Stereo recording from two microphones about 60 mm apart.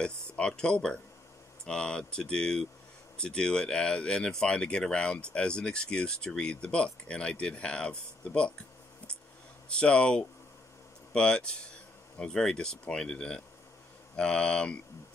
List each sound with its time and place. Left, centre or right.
0.0 s speech: centre
9.7 s speech: centre